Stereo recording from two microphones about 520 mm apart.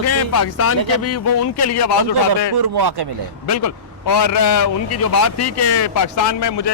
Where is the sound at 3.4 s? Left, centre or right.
Left.